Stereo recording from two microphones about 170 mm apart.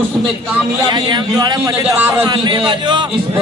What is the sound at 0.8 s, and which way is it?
Speech, 25° right (ahead or behind).